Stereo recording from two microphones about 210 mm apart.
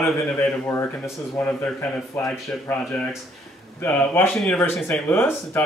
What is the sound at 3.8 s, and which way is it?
Speech, 10° left (ahead or behind).